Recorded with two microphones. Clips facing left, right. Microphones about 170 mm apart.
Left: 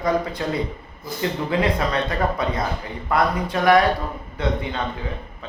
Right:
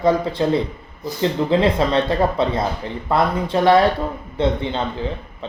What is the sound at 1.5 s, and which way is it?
Speech, 25° right (ahead or behind).